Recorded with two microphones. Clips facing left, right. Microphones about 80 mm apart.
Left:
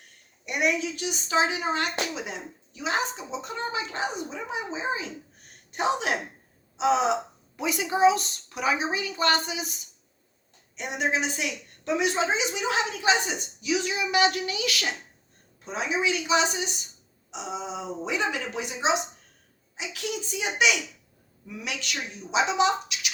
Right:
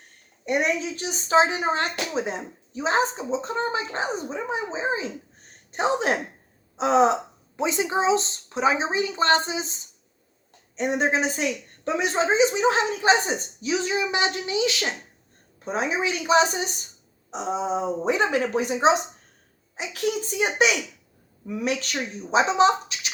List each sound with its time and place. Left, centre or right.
0.1 s a woman's voice: right
7.5 s a woman's voice: right
15.6 s a woman's voice: right